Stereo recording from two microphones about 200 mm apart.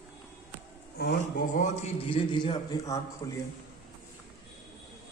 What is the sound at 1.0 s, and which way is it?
A man's voice, 50° left (ahead or behind).